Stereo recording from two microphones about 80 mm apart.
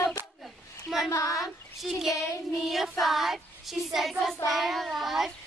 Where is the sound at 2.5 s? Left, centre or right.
Centre.